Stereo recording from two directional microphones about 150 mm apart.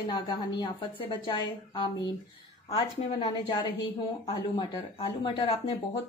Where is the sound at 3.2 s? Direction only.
30° left (ahead or behind).